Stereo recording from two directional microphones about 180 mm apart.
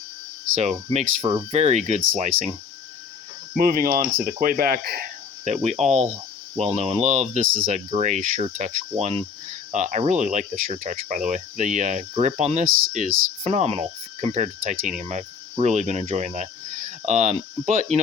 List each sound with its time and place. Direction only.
0.5 s speech: 40° right (ahead or behind)
3.5 s speech: 55° right (ahead or behind)
5.5 s speech: 40° right (ahead or behind)
14.3 s cricket: 45° right (ahead or behind)